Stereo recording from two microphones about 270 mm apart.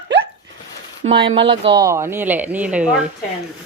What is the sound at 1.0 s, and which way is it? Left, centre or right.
Speech, centre.